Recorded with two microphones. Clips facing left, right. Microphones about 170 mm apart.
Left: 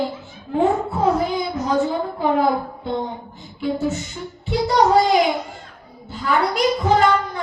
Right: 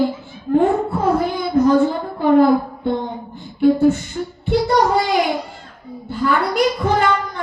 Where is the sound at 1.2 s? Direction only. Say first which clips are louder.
Right 6 dB; 55° right (ahead or behind).